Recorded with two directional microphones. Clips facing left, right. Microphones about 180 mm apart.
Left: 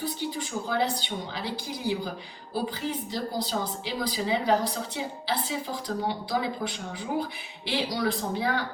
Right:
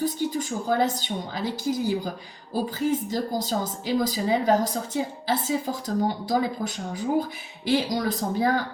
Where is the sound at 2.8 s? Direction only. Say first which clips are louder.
Right 6 dB; 45° right (ahead or behind).